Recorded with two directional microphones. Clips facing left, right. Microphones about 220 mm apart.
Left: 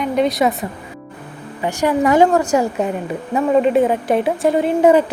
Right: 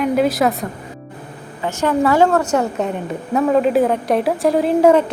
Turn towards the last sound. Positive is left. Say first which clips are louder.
# even
turn(degrees=0)  # may be behind; listen again after turning